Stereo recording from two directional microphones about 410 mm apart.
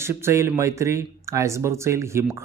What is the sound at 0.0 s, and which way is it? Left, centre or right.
Speech, centre.